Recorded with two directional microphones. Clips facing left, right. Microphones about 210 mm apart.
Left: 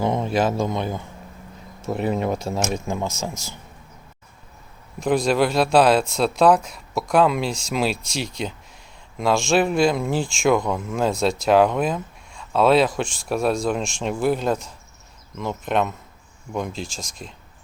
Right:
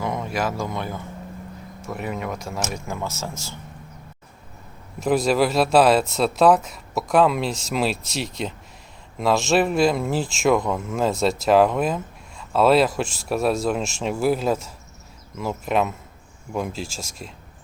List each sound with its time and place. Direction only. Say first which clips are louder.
0.0 s speech: left 5 dB; 25° left (ahead or behind)
1.9 s speech: left 6 dB; 30° left (ahead or behind)
4.9 s speech: even; 5° right (ahead or behind)